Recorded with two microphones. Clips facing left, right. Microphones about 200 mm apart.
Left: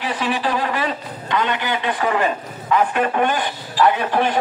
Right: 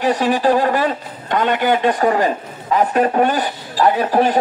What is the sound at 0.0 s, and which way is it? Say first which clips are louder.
A man's voice: right 7 dB; 45° right (ahead or behind).